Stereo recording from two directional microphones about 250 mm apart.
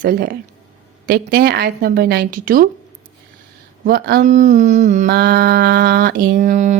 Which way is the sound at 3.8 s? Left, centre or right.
Right.